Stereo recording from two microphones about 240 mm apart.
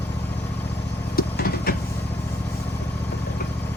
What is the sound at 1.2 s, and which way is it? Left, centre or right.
Vehicle, left.